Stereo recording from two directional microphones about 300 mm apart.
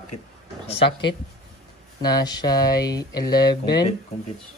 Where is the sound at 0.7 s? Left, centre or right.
Centre.